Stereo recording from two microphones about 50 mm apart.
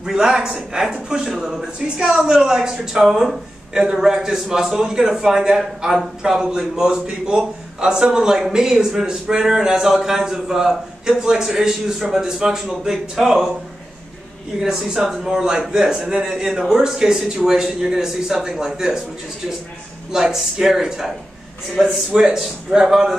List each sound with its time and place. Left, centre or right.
0.0 s a man's voice: centre
14.6 s a man's voice: centre
20.1 s a man's voice: centre